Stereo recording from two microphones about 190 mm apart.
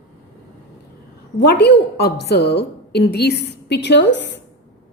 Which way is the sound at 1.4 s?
60° left (ahead or behind).